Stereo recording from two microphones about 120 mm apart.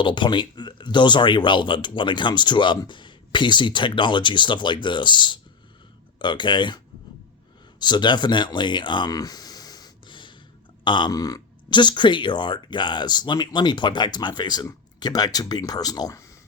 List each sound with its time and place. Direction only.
0.0 s speech: 40° left (ahead or behind)
7.8 s speech: 40° left (ahead or behind)